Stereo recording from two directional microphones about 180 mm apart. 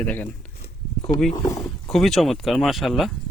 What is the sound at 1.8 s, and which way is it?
Speech, centre (ahead or behind).